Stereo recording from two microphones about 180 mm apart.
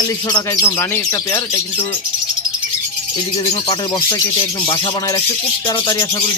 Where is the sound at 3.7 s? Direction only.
20° left (ahead or behind).